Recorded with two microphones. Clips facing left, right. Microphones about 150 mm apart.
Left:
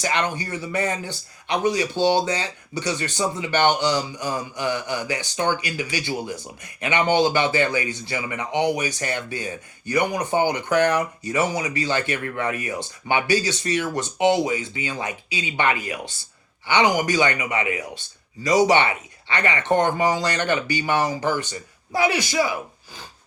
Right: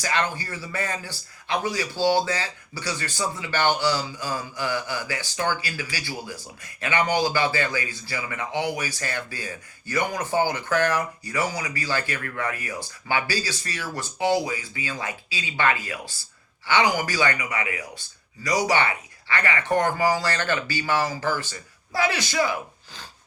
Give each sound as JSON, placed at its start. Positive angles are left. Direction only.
{"t": 0.0, "sound": "speech", "side_deg": 20}